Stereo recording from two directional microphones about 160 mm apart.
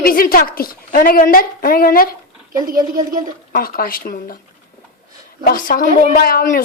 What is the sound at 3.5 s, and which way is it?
Speech, 65° left (ahead or behind).